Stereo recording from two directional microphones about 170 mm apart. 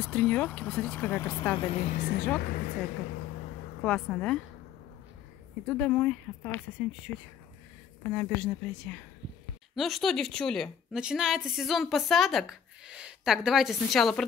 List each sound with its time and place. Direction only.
0.0 s speech: 5° left (ahead or behind)
1.7 s a woman's voice: 40° left (ahead or behind)
2.0 s speech: 65° left (ahead or behind)
3.8 s a woman's voice: 5° left (ahead or behind)
5.7 s speech: 5° left (ahead or behind)
8.0 s speech: 10° left (ahead or behind)
9.8 s a woman's voice: centre (ahead or behind)